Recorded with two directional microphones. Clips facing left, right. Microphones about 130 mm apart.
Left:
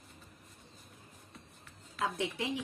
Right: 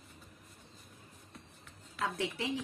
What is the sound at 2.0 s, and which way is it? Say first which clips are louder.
Speech: left 1 dB; 20° left (ahead or behind).